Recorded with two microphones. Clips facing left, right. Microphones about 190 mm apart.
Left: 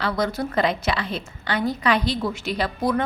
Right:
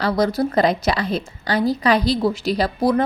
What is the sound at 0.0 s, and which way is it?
A woman's voice, 35° right (ahead or behind).